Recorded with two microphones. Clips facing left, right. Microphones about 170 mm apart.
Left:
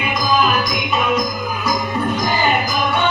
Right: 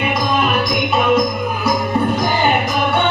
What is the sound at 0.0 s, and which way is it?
Music, 60° right (ahead or behind).